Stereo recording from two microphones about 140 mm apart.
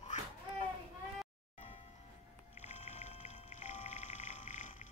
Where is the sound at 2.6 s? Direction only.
55° left (ahead or behind).